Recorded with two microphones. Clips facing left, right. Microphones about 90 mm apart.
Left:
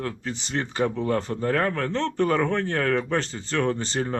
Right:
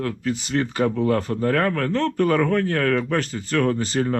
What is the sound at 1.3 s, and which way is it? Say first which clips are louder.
Speech: right 3 dB; 75° right (ahead or behind).